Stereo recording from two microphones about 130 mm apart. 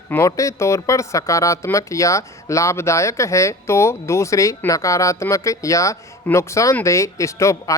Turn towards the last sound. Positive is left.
turn(degrees=25)  # may be behind; listen again after turning